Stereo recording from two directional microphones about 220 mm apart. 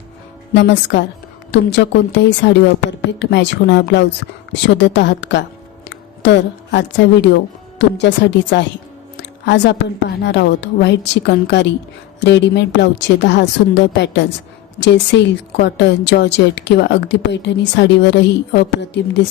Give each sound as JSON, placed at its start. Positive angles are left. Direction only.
{"t": 0.5, "sound": "a woman's voice", "side_deg": 50}